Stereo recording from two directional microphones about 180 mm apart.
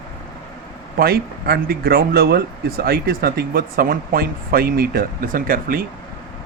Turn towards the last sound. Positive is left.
turn(degrees=-55)  # may be behind; listen again after turning